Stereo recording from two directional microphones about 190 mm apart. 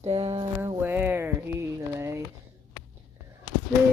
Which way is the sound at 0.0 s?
30° right (ahead or behind).